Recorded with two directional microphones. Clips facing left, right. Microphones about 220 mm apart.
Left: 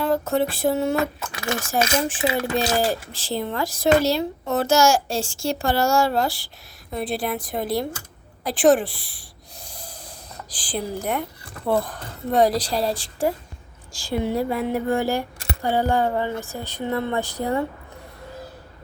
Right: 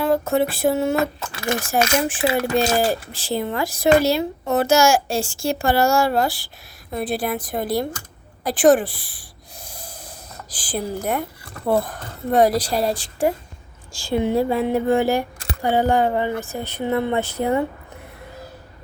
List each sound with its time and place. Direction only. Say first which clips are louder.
0.0 s a sound: right 2 dB; 10° right (ahead or behind)
1.7 s speech: right 1 dB; 10° right (ahead or behind)
8.4 s snort: right 2 dB; centre (ahead or behind)
11.6 s speech: right 2 dB; 15° right (ahead or behind)